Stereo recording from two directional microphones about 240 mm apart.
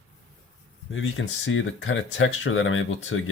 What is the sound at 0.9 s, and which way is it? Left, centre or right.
Speech, left.